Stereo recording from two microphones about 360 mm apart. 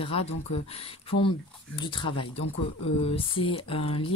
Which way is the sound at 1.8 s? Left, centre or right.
Centre.